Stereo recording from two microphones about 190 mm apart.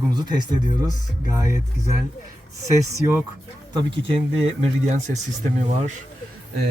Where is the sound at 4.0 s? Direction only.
30° right (ahead or behind).